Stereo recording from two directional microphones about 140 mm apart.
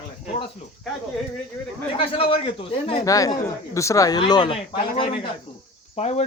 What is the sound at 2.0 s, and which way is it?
Speech, 40° left (ahead or behind).